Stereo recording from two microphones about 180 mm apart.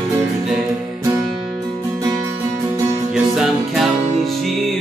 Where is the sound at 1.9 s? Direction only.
20° right (ahead or behind).